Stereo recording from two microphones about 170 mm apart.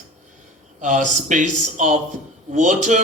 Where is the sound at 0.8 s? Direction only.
50° right (ahead or behind).